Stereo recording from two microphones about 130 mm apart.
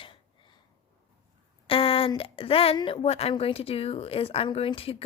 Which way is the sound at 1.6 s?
45° left (ahead or behind).